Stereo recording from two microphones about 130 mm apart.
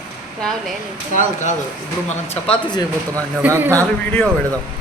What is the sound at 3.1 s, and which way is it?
Speech, 15° right (ahead or behind).